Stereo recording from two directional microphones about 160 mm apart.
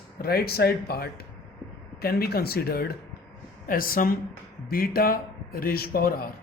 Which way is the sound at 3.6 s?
65° left (ahead or behind).